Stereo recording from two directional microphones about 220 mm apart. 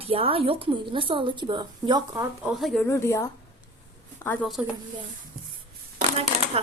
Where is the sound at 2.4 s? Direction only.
Centre (ahead or behind).